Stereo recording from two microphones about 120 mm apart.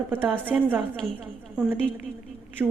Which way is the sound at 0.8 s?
5° left (ahead or behind).